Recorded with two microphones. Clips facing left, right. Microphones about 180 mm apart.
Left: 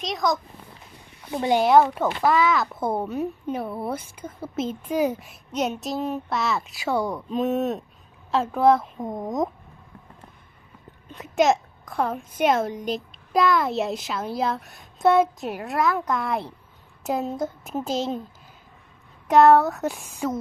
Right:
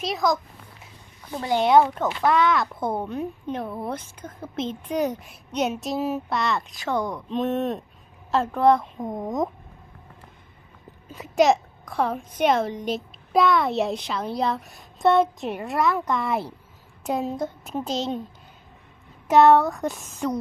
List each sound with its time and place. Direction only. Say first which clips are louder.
0.0 s speech: right 1 dB; centre (ahead or behind)
1.3 s speech: left 3 dB; 20° left (ahead or behind)
1.6 s speech: right 1 dB; centre (ahead or behind)
11.1 s speech: right 1 dB; centre (ahead or behind)
19.3 s speech: even; centre (ahead or behind)